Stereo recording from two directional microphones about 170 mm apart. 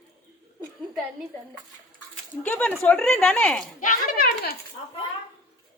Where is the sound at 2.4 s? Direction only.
10° left (ahead or behind).